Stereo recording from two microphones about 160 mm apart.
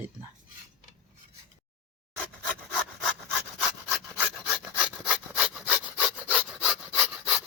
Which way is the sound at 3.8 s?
15° right (ahead or behind).